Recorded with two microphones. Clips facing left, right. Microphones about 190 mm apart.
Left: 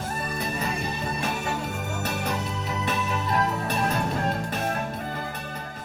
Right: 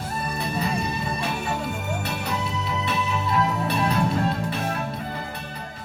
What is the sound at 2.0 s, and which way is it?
Music, 45° left (ahead or behind).